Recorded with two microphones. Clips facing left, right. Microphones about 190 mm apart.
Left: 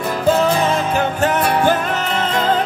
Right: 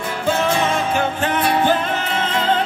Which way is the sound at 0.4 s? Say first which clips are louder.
Left 3 dB; 35° left (ahead or behind).